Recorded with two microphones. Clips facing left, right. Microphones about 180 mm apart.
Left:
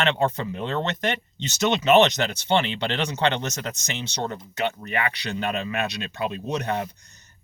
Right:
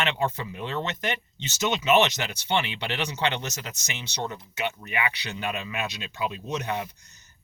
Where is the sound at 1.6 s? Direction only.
55° left (ahead or behind).